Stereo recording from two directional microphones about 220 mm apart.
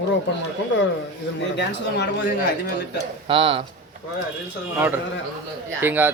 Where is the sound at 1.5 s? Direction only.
50° left (ahead or behind).